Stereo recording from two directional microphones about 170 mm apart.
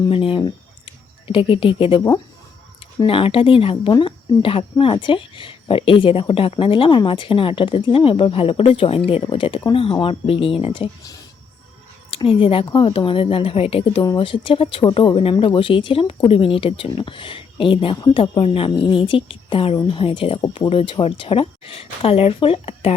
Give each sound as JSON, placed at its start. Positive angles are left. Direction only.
{"t": 0.0, "sound": "speech", "side_deg": 30}